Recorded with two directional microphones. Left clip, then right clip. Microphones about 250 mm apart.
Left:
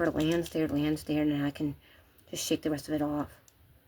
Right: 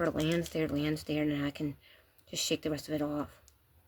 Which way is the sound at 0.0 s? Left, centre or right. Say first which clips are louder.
Left 3 dB; right.